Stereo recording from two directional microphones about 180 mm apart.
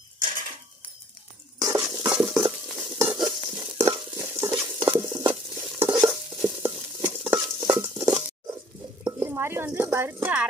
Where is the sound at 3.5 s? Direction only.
20° right (ahead or behind).